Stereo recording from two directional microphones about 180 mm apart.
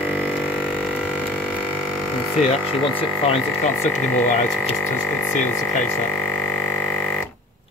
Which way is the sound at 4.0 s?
10° left (ahead or behind).